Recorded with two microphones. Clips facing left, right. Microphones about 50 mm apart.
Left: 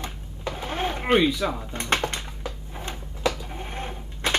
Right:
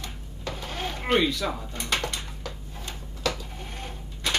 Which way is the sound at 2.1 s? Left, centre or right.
Centre.